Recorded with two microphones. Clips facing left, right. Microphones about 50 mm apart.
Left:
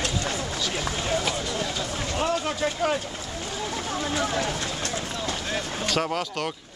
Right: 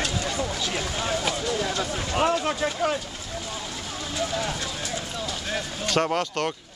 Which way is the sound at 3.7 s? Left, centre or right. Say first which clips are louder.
Left 5 dB; left.